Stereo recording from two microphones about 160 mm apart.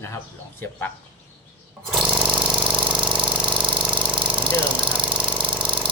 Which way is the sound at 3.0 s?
30° right (ahead or behind).